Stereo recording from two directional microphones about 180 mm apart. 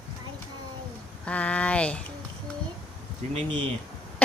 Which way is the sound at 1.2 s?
5° left (ahead or behind).